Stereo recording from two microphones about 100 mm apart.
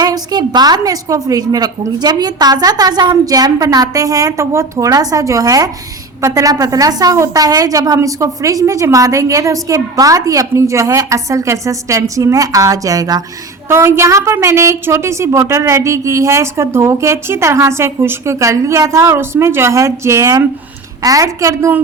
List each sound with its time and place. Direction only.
0.0 s a woman's voice: 40° right (ahead or behind)
13.7 s a woman's voice: 25° right (ahead or behind)